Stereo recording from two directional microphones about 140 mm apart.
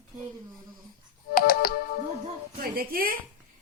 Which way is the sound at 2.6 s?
90° right.